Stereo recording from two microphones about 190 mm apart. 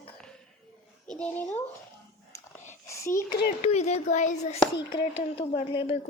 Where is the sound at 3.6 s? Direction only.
35° left (ahead or behind).